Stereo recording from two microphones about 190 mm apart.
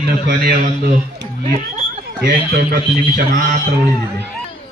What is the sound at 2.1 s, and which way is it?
Speech, 60° right (ahead or behind).